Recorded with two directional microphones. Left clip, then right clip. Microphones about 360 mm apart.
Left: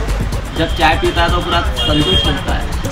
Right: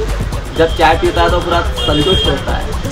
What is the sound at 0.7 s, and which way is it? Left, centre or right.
Speech, centre.